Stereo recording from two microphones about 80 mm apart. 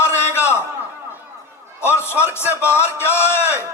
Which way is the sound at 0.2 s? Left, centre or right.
Left.